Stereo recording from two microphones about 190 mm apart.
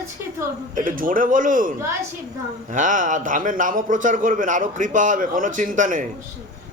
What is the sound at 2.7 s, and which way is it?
Speech, 45° right (ahead or behind).